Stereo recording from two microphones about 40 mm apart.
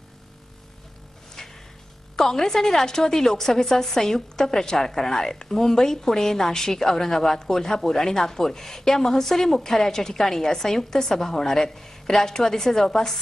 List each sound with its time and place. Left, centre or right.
1.4 s music: centre
2.1 s a woman's voice: centre